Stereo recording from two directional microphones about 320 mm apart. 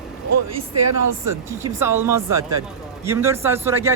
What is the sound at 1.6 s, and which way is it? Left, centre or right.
A man's voice, centre.